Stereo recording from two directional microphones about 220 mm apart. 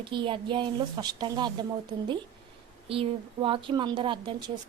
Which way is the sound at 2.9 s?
25° right (ahead or behind).